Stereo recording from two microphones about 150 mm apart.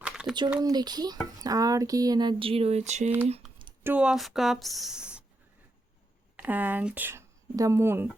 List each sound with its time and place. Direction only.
0.0 s a sound: 5° right (ahead or behind)
0.6 s speech: 25° right (ahead or behind); by 3.1 s 50° right (ahead or behind)
3.8 s speech: 5° right (ahead or behind)
6.3 s speech: 10° right (ahead or behind)